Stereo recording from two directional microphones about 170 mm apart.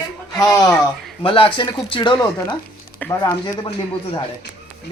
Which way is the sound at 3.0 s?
10° left (ahead or behind).